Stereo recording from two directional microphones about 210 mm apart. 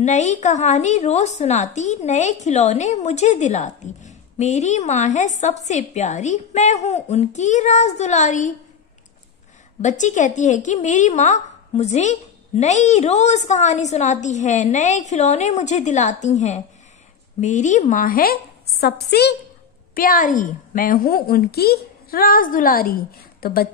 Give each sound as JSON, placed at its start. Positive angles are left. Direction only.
{"t": 0.0, "sound": "a woman's voice", "side_deg": 35}
{"t": 9.8, "sound": "a woman's voice", "side_deg": 35}